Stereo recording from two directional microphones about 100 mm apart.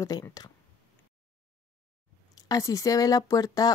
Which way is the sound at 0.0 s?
35° left (ahead or behind).